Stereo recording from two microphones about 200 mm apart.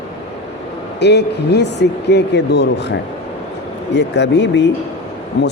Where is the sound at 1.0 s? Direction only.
60° left (ahead or behind).